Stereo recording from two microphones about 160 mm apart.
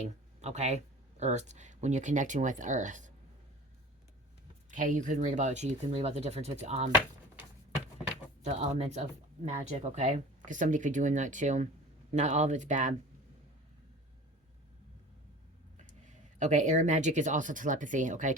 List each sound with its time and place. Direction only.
0.4 s speech: 45° right (ahead or behind)
4.7 s speech: 55° right (ahead or behind)
8.4 s speech: 45° right (ahead or behind)
15.9 s speech: 50° right (ahead or behind)